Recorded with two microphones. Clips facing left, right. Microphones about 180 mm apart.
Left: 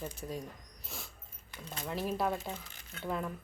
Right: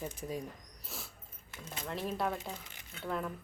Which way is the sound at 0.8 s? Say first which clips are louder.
Even; 5° right (ahead or behind).